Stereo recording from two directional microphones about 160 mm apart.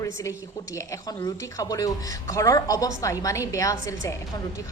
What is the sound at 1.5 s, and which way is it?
A woman's voice, 20° left (ahead or behind).